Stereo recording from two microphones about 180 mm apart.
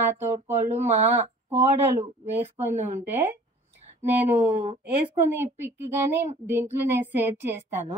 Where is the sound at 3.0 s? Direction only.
10° right (ahead or behind).